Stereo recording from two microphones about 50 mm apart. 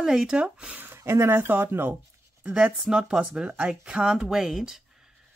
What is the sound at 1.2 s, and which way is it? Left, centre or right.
Speech, right.